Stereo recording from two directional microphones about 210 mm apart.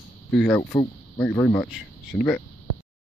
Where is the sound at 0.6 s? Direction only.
15° left (ahead or behind).